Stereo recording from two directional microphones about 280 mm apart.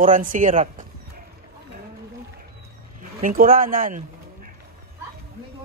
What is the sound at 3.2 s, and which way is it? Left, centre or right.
Speech, right.